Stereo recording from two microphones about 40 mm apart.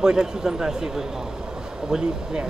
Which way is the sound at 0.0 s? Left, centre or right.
Centre.